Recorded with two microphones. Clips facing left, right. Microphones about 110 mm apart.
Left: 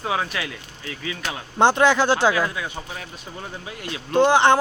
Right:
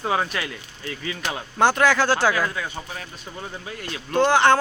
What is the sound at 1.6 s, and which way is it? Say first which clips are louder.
Speech: left 2 dB; 20° left (ahead or behind).